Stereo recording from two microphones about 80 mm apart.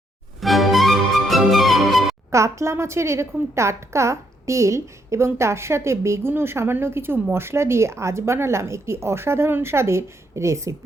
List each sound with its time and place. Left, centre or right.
0.3 s music: centre
2.3 s a woman's voice: right